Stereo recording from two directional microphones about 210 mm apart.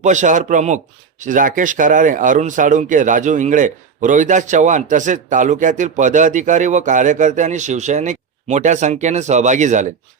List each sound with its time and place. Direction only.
0.0 s speech: 35° right (ahead or behind)